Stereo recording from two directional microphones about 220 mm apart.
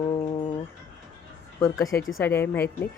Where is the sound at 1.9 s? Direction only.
10° left (ahead or behind).